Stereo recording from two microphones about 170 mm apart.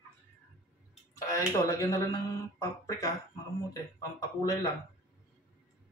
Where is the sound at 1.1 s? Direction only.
20° left (ahead or behind).